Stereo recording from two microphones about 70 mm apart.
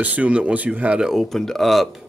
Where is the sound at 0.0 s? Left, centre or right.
Right.